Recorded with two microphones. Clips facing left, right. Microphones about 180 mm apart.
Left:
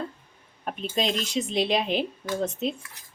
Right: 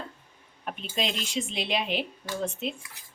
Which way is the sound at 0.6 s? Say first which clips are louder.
Left 4 dB; 40° left (ahead or behind).